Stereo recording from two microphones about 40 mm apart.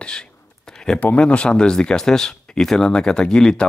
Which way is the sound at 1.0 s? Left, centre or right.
Left.